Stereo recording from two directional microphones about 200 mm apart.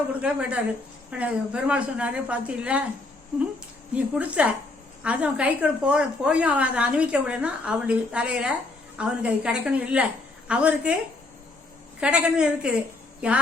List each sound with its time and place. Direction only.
0.2 s a woman's voice: 5° right (ahead or behind)
3.9 s a woman's voice: 5° right (ahead or behind)
11.9 s a woman's voice: 5° right (ahead or behind)